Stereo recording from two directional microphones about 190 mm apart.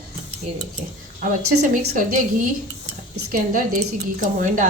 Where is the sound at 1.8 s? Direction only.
45° right (ahead or behind).